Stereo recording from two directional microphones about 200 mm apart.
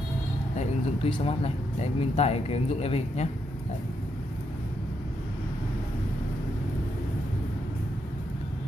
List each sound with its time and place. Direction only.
0.6 s speech: 30° left (ahead or behind)